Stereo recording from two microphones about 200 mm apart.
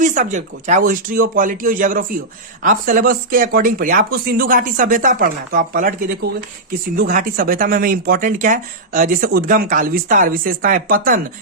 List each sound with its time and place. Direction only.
0.0 s speech: 40° right (ahead or behind)